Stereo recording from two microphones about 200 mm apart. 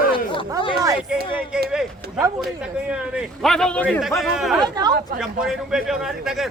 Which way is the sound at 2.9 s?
5° right (ahead or behind).